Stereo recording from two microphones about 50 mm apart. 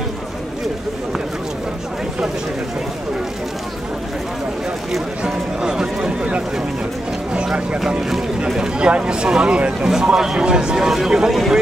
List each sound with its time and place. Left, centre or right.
5.2 s a sound: centre
7.3 s vehicle: right
8.5 s speech: centre
9.8 s speech: centre